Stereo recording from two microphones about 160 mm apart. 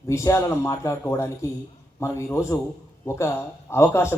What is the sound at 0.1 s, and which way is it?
Speech, 20° left (ahead or behind).